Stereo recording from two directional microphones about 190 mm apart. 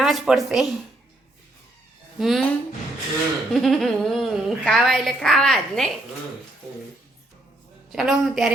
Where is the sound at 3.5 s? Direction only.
Centre (ahead or behind).